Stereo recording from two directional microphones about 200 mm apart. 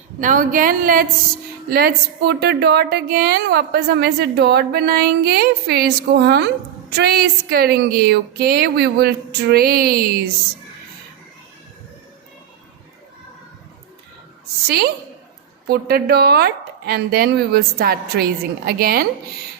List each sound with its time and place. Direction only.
0.2 s a woman's voice: 40° right (ahead or behind)
15.6 s a woman's voice: 50° right (ahead or behind)